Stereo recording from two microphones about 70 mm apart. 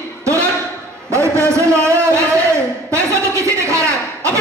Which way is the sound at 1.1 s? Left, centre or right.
Right.